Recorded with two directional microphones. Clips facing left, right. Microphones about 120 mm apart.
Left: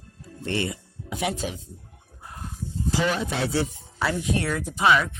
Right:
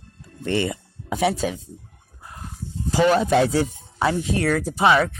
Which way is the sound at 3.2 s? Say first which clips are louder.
Right 10 dB; 55° right (ahead or behind).